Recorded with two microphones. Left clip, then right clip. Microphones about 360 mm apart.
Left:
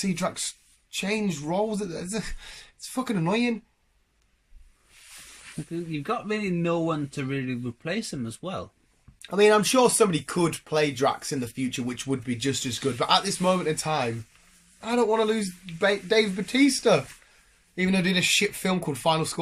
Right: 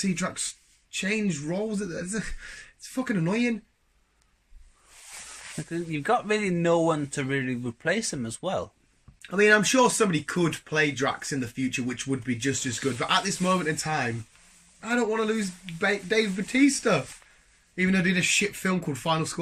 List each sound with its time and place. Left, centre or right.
0.0 s speech: centre
5.9 s speech: centre
9.2 s speech: centre